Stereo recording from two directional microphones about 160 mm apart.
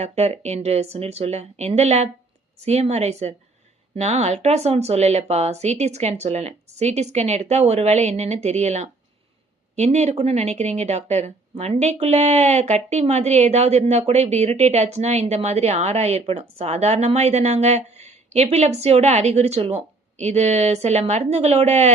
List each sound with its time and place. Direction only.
0.0 s a woman's voice: 45° right (ahead or behind)